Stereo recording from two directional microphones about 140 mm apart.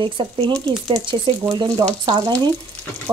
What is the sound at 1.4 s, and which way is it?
Speech, 30° right (ahead or behind).